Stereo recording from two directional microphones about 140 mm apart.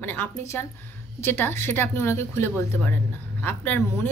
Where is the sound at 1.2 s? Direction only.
15° left (ahead or behind).